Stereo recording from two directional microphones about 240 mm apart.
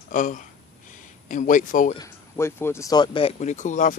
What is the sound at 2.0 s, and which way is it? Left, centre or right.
Speech, centre.